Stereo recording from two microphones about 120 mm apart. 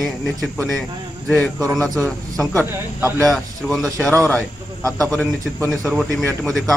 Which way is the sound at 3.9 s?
10° left (ahead or behind).